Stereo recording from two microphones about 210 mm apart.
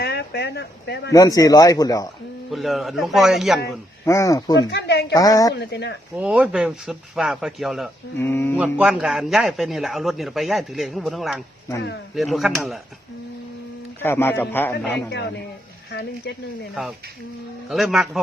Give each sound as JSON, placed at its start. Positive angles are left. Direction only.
{"t": 0.0, "sound": "a sound", "side_deg": 50}
{"t": 1.1, "sound": "speech", "side_deg": 15}
{"t": 2.5, "sound": "a man's voice", "side_deg": 0}
{"t": 4.0, "sound": "speech", "side_deg": 15}
{"t": 4.7, "sound": "speech", "side_deg": 55}
{"t": 5.1, "sound": "speech", "side_deg": 15}
{"t": 5.5, "sound": "speech", "side_deg": 55}
{"t": 6.1, "sound": "a man's voice", "side_deg": -5}
{"t": 8.2, "sound": "speech", "side_deg": 10}
{"t": 8.8, "sound": "a man's voice", "side_deg": -5}
{"t": 14.0, "sound": "speech", "side_deg": 10}
{"t": 15.9, "sound": "speech", "side_deg": 50}
{"t": 17.7, "sound": "a man's voice", "side_deg": 0}